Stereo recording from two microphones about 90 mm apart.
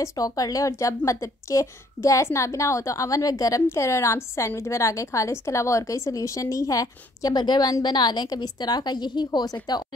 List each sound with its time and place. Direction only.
0.0 s speech: 40° left (ahead or behind)